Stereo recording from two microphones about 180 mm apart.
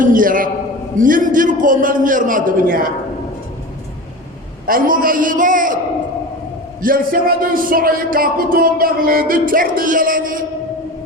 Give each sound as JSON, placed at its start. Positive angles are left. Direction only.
{"t": 0.0, "sound": "speech", "side_deg": -50}
{"t": 4.6, "sound": "speech", "side_deg": -50}
{"t": 6.8, "sound": "speech", "side_deg": -50}